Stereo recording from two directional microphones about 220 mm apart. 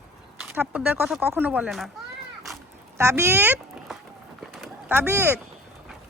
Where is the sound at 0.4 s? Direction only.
10° right (ahead or behind).